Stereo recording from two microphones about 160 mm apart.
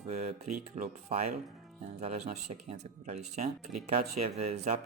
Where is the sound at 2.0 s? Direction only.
45° right (ahead or behind).